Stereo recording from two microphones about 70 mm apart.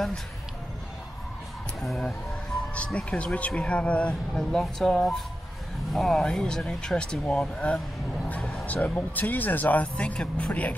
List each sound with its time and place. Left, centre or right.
1.8 s speech: centre
2.7 s speech: centre
4.3 s speech: centre